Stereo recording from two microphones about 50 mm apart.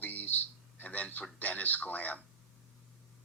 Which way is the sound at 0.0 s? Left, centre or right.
Left.